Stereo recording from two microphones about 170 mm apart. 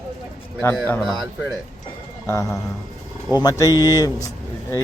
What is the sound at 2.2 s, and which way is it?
A man's voice, 15° left (ahead or behind).